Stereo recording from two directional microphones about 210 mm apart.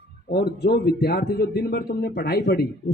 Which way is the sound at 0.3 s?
50° left (ahead or behind).